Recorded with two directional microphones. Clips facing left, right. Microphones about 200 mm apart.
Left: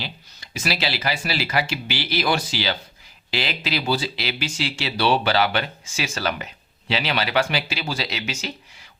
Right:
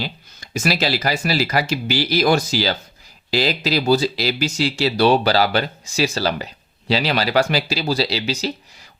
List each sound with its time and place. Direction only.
0.0 s speech: 45° right (ahead or behind)